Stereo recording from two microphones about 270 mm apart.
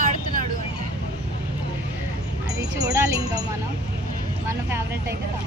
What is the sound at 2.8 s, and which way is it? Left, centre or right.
Speech, centre.